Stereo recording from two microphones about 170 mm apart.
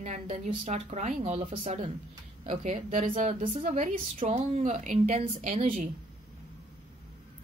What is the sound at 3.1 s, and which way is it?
Speech, 50° right (ahead or behind).